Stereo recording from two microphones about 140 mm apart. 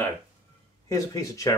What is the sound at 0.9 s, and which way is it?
Speech, 25° left (ahead or behind).